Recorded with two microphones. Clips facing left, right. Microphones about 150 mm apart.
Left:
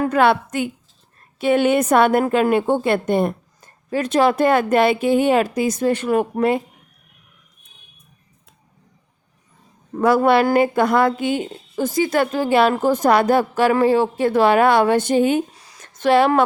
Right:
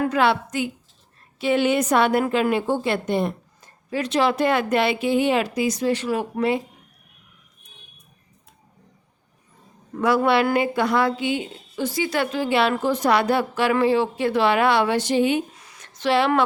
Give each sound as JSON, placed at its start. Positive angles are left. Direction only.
{"t": 0.1, "sound": "a woman's voice", "side_deg": 50}
{"t": 10.0, "sound": "a woman's voice", "side_deg": 45}
{"t": 16.0, "sound": "a woman's voice", "side_deg": 50}